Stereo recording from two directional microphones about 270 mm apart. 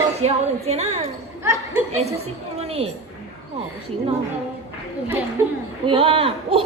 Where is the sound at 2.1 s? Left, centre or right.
Right.